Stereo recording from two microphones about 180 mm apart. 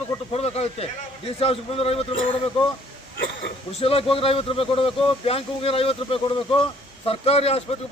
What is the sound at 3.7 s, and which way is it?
Speech, 35° left (ahead or behind).